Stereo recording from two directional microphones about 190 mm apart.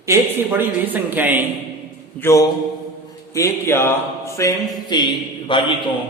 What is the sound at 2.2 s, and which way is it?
A man's voice, 15° left (ahead or behind).